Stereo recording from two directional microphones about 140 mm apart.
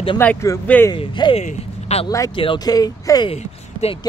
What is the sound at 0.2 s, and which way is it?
Speech, 10° left (ahead or behind).